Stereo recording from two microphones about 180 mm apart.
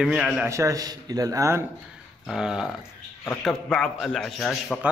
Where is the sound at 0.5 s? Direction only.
15° right (ahead or behind).